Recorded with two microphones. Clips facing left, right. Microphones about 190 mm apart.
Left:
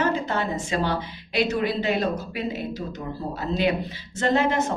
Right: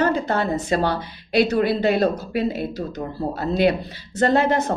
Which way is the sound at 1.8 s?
35° right (ahead or behind).